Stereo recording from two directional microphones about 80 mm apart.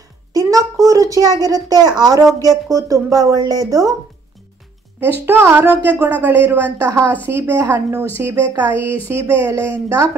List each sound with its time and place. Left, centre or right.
0.3 s a woman's voice: right
5.2 s a woman's voice: right